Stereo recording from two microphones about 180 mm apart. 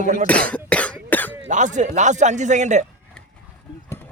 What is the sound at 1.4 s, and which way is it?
Speech, 45° right (ahead or behind).